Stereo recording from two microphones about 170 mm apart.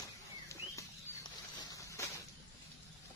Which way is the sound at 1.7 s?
20° left (ahead or behind).